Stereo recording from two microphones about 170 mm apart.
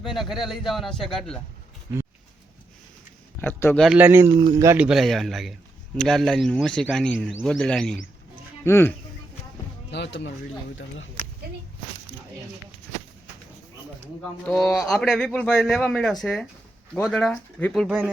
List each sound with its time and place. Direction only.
0.0 s a man's voice: centre (ahead or behind)
3.4 s speech: 10° left (ahead or behind)
3.8 s a man's voice: 10° right (ahead or behind)
4.8 s a man's voice: centre (ahead or behind); by 9.0 s 15° left (ahead or behind)
9.9 s speech: 85° left
14.2 s a man's voice: 5° left (ahead or behind)